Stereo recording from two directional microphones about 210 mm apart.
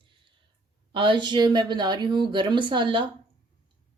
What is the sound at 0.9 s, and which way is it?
A woman's voice, 25° right (ahead or behind).